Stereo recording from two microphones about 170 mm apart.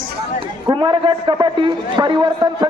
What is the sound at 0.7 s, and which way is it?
A man's voice, 30° right (ahead or behind).